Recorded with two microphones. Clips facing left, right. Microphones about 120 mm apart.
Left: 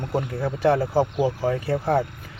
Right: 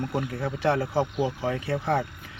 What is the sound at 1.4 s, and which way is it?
Speech, 40° left (ahead or behind).